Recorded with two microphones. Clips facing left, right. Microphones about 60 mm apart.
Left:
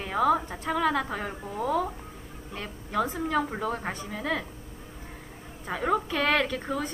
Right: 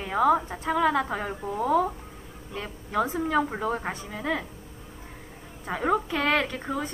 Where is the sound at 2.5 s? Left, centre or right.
Right.